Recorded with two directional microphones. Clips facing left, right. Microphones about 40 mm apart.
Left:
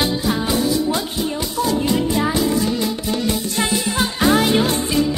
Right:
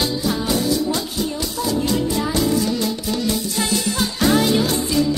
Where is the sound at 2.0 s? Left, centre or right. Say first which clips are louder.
Left 2 dB; left.